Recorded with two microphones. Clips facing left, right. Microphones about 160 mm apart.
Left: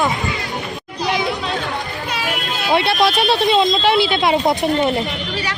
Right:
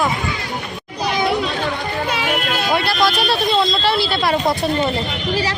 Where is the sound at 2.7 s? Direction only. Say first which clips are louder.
Left 3 dB; 25° left (ahead or behind).